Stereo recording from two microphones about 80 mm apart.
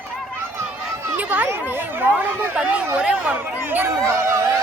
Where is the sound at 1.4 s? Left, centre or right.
Right.